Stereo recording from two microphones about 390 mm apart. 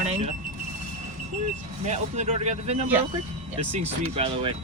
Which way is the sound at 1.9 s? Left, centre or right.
Centre.